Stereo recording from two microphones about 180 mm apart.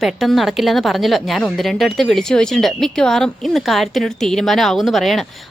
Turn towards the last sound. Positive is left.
turn(degrees=0)  # may be behind; listen again after turning